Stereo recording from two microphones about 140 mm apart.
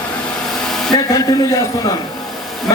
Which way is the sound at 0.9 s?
25° left (ahead or behind).